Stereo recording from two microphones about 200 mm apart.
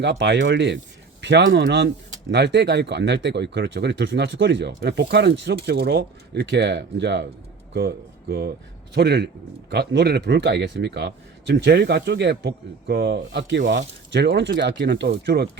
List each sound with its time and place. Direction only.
0.0 s speech: 65° right (ahead or behind)